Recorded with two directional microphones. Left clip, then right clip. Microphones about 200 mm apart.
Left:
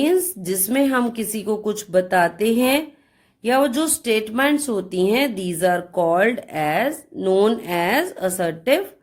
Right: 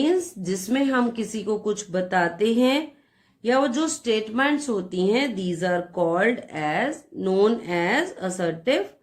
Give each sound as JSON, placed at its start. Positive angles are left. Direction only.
{"t": 0.0, "sound": "speech", "side_deg": 40}